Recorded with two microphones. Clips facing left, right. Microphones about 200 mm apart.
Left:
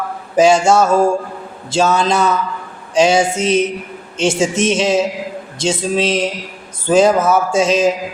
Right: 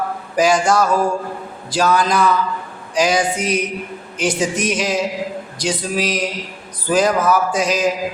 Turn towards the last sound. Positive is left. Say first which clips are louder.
# left 4 dB
turn(degrees=25)  # may be behind; listen again after turning